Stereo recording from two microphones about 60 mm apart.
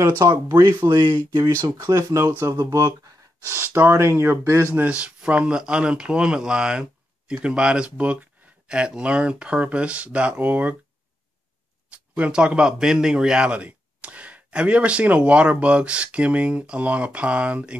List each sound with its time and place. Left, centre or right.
0.2 s speech: right
3.6 s speech: right
4.8 s speech: centre
11.9 s a man's voice: centre